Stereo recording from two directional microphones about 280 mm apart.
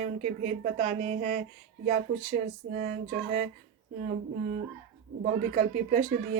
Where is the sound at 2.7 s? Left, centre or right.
Right.